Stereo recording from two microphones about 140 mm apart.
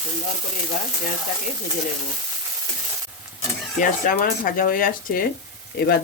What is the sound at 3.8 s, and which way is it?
Speech, 85° left.